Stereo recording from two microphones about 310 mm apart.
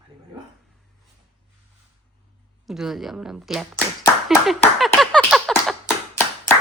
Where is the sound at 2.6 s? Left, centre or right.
Centre.